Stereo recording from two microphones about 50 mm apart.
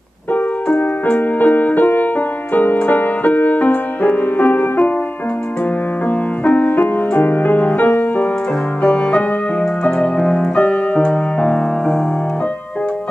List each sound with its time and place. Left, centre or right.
0.3 s music: left
6.0 s music: left
8.8 s music: centre
11.4 s music: centre